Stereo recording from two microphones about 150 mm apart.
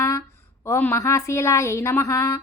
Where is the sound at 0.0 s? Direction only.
20° left (ahead or behind).